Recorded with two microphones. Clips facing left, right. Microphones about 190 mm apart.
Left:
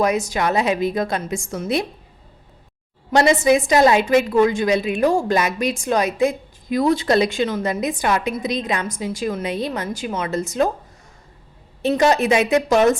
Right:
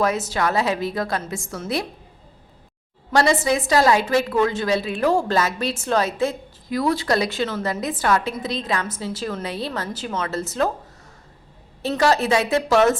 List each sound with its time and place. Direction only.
0.0 s a woman's voice: 15° left (ahead or behind)
3.1 s a woman's voice: 20° left (ahead or behind)
11.8 s a woman's voice: 20° left (ahead or behind)